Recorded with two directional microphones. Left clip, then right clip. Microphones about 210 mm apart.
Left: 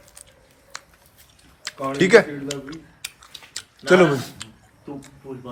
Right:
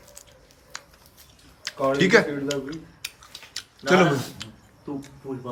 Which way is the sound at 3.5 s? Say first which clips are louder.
Left 4 dB; 5° right (ahead or behind).